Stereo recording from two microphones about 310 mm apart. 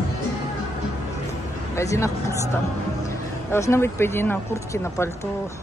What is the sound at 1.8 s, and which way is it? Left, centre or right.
Speech, centre.